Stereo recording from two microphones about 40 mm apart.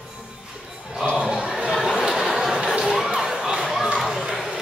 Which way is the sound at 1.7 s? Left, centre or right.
Centre.